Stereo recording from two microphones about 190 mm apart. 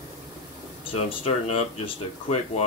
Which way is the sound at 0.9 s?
30° left (ahead or behind).